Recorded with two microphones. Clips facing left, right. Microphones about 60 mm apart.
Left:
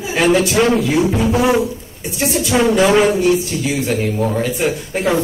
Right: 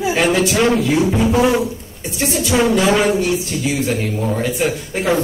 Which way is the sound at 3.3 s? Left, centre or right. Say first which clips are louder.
Left 1 dB; centre.